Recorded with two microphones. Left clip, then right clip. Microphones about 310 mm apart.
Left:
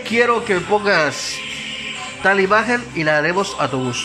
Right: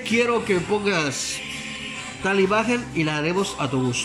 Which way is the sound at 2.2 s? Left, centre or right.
Centre.